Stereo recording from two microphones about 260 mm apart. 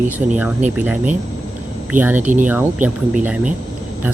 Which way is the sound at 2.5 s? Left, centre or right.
Centre.